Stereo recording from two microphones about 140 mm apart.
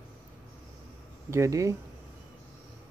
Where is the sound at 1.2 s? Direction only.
20° right (ahead or behind).